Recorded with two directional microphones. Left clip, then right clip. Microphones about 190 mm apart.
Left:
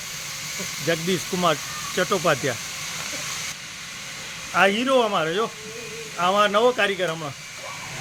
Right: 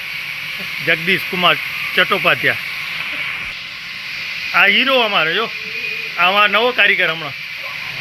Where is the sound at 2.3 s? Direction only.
5° right (ahead or behind).